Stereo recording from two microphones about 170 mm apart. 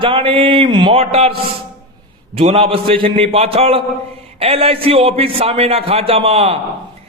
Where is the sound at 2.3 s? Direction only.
35° right (ahead or behind).